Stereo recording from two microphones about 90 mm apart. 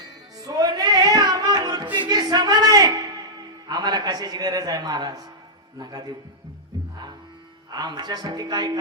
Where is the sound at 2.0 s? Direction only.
50° right (ahead or behind).